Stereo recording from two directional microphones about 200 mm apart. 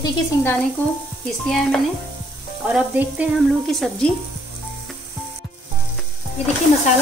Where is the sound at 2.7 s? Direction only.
5° right (ahead or behind).